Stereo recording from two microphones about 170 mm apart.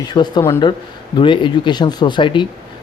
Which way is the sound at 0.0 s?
25° left (ahead or behind).